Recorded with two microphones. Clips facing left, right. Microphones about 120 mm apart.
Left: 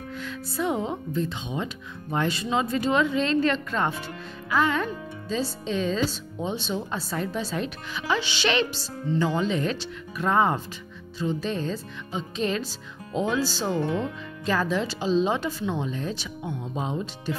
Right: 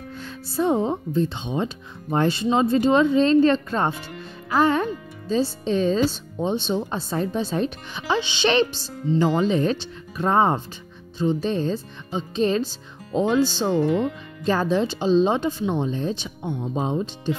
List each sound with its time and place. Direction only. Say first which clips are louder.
0.5 s speech: right 6 dB; 30° right (ahead or behind)
6.4 s speech: right 6 dB; 30° right (ahead or behind)
9.3 s speech: right 5 dB; 35° right (ahead or behind)